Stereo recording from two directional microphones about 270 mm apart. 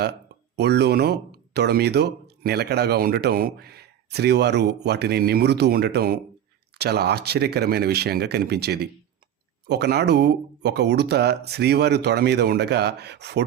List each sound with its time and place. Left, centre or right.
0.0 s speech: right